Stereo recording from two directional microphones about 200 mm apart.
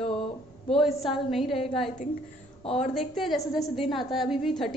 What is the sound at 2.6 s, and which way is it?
Speech, 30° left (ahead or behind).